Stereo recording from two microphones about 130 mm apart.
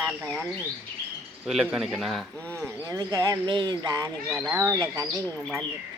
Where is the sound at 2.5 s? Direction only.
15° right (ahead or behind).